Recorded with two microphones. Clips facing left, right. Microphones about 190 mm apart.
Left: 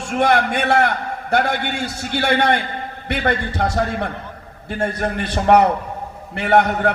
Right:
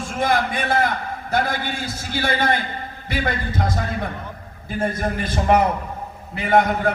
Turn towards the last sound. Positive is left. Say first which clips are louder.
# left 2 dB
turn(degrees=70)  # may be behind; listen again after turning